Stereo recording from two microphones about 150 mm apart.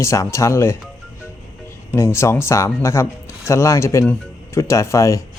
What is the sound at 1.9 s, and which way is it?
Speech, 15° left (ahead or behind).